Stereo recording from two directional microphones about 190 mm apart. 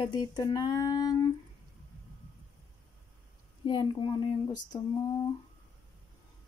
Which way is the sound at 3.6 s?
25° left (ahead or behind).